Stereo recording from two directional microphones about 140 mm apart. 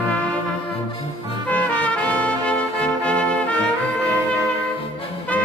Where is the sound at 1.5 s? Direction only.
10° left (ahead or behind).